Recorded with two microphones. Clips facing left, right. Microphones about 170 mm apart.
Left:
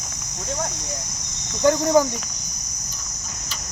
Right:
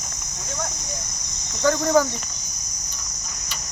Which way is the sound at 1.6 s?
20° left (ahead or behind).